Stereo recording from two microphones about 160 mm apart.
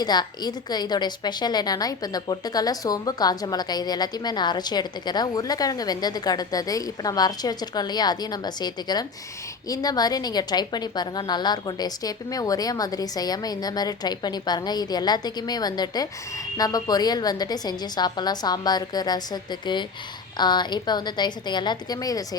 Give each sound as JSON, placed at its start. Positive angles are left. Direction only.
{"t": 0.0, "sound": "a woman's voice", "side_deg": 25}